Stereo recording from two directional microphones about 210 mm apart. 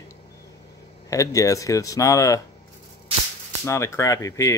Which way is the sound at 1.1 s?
15° left (ahead or behind).